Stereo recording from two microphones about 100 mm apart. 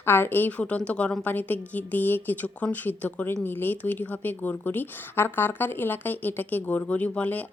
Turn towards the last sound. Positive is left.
turn(degrees=15)  # may be behind; listen again after turning